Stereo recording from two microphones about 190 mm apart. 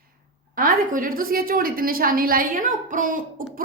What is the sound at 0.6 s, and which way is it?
A woman's voice, 45° right (ahead or behind).